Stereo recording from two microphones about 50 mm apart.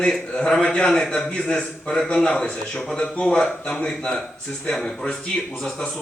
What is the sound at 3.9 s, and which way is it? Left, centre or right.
Speech, centre.